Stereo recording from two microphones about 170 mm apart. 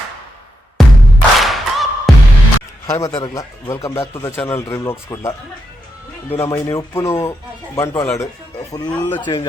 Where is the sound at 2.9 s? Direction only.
20° left (ahead or behind).